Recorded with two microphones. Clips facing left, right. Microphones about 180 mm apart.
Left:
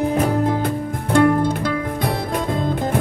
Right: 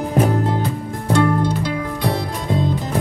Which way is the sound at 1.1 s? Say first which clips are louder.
Left 3 dB; 50° left (ahead or behind).